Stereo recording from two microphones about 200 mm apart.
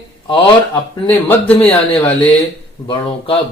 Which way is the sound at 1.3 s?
10° left (ahead or behind).